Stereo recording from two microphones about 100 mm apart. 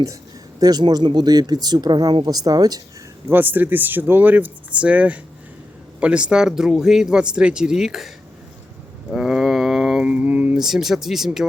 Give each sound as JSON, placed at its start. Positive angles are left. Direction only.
{"t": 0.6, "sound": "speech", "side_deg": -40}
{"t": 3.2, "sound": "speech", "side_deg": -20}
{"t": 9.1, "sound": "speech", "side_deg": -5}
{"t": 10.6, "sound": "speech", "side_deg": -5}